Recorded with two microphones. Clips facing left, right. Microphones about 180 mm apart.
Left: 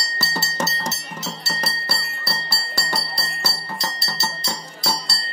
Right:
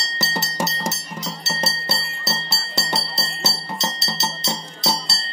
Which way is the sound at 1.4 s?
25° right (ahead or behind).